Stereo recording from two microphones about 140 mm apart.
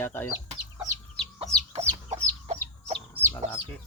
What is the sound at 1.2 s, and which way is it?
Chicken, 5° left (ahead or behind).